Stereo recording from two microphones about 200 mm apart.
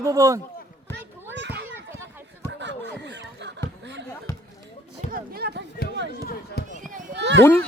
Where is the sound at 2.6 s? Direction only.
60° right (ahead or behind).